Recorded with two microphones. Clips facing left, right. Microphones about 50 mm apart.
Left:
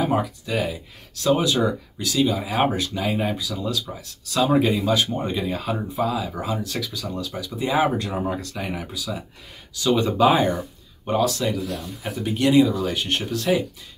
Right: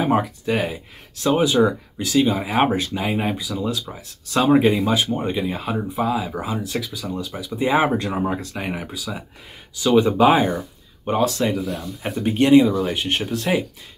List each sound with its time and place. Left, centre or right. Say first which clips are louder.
0.0 s speech: right 3 dB; right
1.2 s speech: right 3 dB; centre
4.8 s speech: right 1 dB; centre
11.1 s speech: right 2 dB; right